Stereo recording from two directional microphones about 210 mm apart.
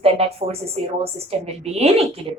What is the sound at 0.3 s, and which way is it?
Speech, 30° right (ahead or behind).